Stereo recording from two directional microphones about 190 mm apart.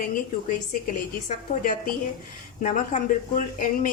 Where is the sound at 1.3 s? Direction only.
45° left (ahead or behind).